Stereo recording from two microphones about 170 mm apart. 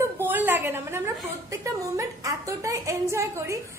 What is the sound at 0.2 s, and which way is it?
A woman's voice, 10° right (ahead or behind).